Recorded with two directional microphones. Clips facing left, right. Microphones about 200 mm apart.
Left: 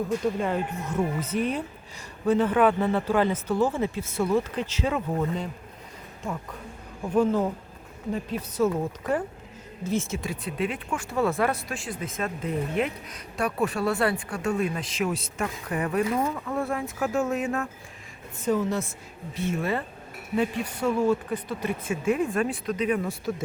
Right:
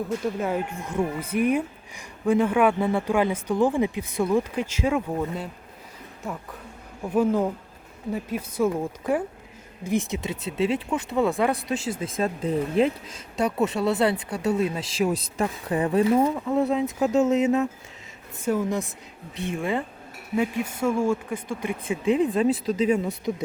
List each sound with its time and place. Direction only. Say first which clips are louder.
0.3 s speech: right 1 dB; 10° right (ahead or behind)
7.1 s speech: right 1 dB; 10° right (ahead or behind)
11.7 s speech: right 6 dB; 25° right (ahead or behind)
20.3 s speech: right 1 dB; 10° right (ahead or behind)